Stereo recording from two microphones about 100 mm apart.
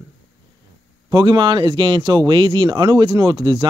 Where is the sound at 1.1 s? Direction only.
50° right (ahead or behind).